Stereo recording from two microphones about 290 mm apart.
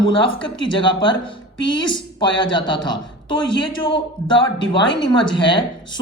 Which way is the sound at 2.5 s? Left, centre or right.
Centre.